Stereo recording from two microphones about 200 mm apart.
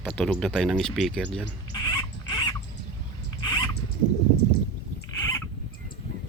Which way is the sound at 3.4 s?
20° left (ahead or behind).